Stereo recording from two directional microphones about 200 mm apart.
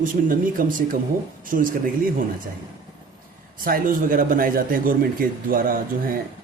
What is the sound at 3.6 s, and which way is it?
Speech, 45° right (ahead or behind).